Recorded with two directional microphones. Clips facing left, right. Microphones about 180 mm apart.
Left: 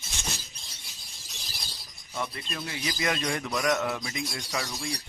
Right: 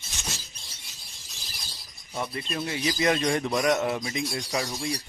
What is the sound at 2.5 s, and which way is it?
Speech, 25° right (ahead or behind).